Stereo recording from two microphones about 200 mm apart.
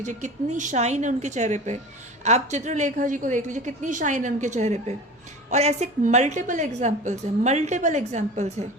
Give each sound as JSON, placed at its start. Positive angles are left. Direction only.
{"t": 0.0, "sound": "a woman's voice", "side_deg": -40}